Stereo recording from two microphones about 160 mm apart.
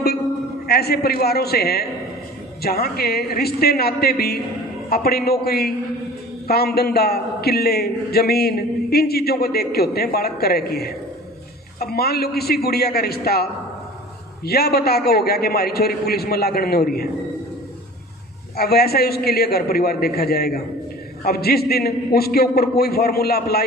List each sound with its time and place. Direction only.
0.7 s a man's voice: 85° left
18.5 s a man's voice: 75° left (ahead or behind)